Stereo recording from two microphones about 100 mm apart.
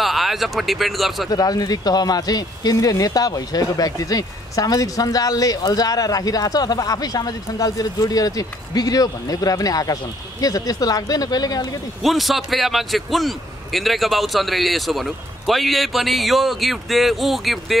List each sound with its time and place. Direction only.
0.0 s speech: centre (ahead or behind)
1.3 s speech: 40° left (ahead or behind)
12.0 s a man's voice: centre (ahead or behind)